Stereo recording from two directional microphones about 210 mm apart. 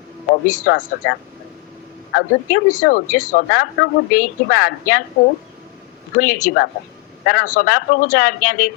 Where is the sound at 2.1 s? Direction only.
40° left (ahead or behind).